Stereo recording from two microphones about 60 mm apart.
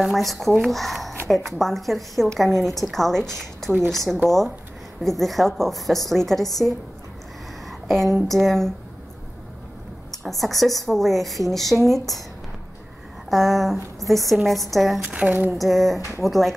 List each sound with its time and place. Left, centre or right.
0.0 s a woman's voice: centre
7.6 s a sound: centre
8.3 s a woman's voice: centre
10.1 s a woman's voice: centre
13.3 s a woman's voice: centre
15.0 s speech: centre
15.5 s a woman's voice: centre